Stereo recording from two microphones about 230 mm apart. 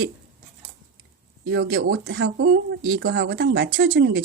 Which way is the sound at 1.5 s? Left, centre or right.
Right.